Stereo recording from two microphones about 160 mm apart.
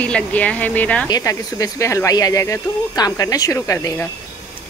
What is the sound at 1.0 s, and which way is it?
Speech, 20° left (ahead or behind).